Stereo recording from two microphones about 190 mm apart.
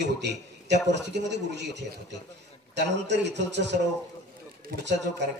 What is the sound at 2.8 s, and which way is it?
Speech, 65° right (ahead or behind).